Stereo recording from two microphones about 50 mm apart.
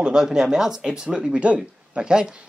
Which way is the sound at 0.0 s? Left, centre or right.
Centre.